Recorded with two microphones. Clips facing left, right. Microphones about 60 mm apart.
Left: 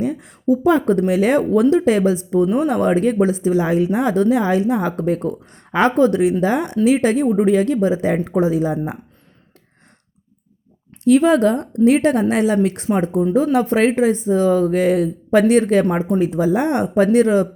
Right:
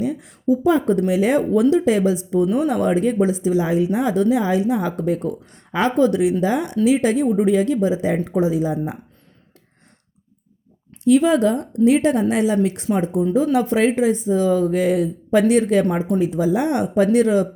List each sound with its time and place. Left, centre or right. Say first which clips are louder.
0.0 s speech: left 1 dB; left
11.0 s speech: left 2 dB; left